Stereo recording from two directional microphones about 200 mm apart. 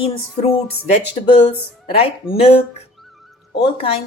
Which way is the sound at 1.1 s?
25° left (ahead or behind).